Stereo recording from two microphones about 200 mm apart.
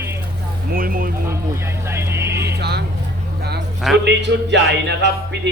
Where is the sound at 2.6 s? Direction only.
55° right (ahead or behind).